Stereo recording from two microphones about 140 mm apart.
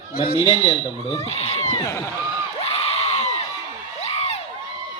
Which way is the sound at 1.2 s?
45° left (ahead or behind).